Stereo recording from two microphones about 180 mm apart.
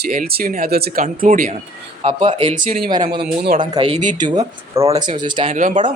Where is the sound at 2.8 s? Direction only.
25° right (ahead or behind).